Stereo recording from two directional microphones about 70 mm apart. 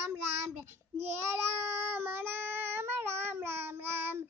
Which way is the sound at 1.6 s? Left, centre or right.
Right.